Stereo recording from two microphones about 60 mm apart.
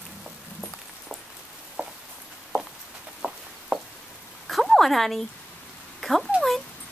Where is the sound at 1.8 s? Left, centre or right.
Right.